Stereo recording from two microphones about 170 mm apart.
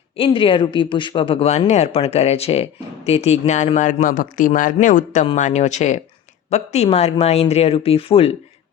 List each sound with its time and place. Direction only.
0.2 s speech: 30° left (ahead or behind)